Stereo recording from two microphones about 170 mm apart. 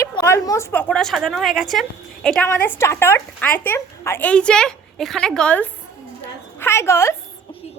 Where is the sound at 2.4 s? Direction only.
10° left (ahead or behind).